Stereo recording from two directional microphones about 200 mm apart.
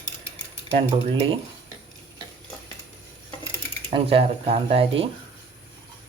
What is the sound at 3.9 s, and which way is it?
Speech, 25° right (ahead or behind).